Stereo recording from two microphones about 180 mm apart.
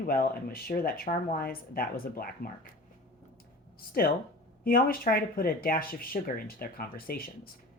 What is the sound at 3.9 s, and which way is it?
Speech, 55° left (ahead or behind).